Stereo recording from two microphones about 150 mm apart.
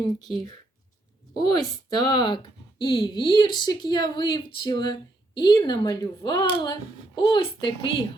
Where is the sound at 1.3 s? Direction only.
30° left (ahead or behind).